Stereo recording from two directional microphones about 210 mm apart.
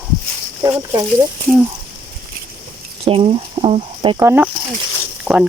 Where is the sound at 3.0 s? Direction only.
25° right (ahead or behind).